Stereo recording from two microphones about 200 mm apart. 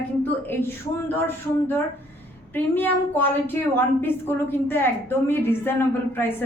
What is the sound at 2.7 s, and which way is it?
Speech, 10° left (ahead or behind).